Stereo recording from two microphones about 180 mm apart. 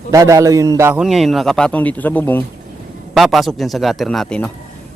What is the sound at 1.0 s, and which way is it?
Speech, centre (ahead or behind).